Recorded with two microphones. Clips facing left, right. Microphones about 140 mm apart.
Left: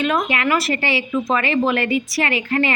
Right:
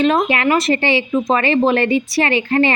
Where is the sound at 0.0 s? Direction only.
30° right (ahead or behind).